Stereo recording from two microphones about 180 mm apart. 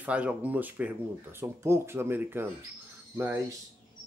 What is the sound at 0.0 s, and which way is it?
Speech, 5° right (ahead or behind).